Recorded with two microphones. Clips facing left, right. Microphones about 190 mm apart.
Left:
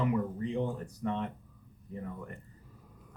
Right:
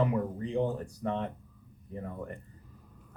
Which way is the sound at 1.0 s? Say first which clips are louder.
Even; 35° right (ahead or behind).